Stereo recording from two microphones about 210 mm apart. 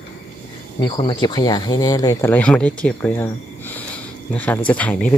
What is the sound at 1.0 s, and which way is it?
Speech, 20° left (ahead or behind).